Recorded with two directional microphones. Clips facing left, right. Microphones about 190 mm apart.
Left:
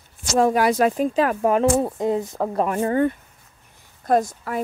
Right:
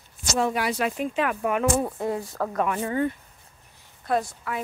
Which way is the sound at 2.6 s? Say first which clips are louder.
Left 5 dB; 40° left (ahead or behind).